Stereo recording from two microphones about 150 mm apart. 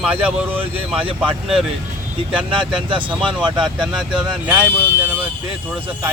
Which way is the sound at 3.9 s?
5° right (ahead or behind).